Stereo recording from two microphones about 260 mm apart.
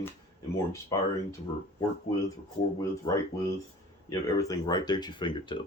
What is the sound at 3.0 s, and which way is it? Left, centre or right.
Speech, centre.